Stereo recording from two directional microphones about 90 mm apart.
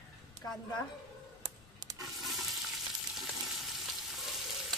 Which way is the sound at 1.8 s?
45° right (ahead or behind).